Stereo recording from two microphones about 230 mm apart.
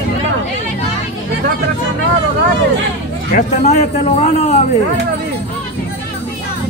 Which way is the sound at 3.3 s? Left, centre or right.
Left.